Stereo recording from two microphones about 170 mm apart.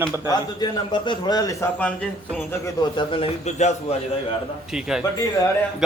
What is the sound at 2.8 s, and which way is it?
A man's voice, 30° left (ahead or behind).